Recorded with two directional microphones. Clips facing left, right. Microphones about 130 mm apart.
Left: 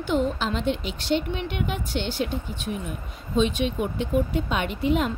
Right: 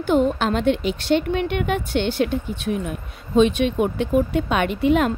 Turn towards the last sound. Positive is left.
turn(degrees=-65)  # may be behind; listen again after turning